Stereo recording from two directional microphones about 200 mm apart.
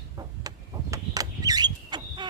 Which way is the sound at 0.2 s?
20° right (ahead or behind).